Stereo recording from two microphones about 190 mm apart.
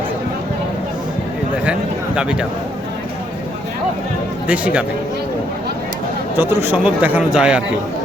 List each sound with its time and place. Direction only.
1.6 s speech: 5° right (ahead or behind)
4.4 s speech: 5° right (ahead or behind)
6.3 s speech: 10° right (ahead or behind)